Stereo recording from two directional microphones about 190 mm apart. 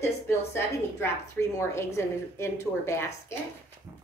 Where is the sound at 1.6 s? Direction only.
15° left (ahead or behind).